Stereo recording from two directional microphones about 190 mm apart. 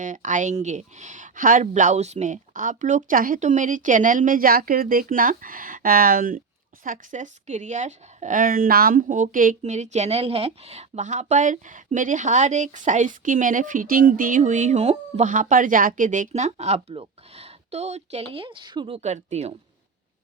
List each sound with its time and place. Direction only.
0.0 s speech: 40° right (ahead or behind); by 18.9 s 25° right (ahead or behind)
18.9 s speech: 35° right (ahead or behind)